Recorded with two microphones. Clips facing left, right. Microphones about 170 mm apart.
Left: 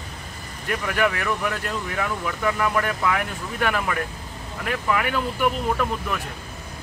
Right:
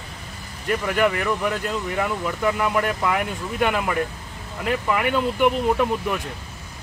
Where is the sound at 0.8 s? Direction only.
5° right (ahead or behind).